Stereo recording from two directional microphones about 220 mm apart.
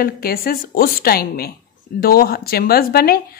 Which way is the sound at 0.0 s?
45° left (ahead or behind).